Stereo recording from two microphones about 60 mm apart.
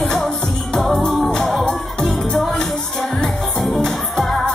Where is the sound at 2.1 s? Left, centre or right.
Centre.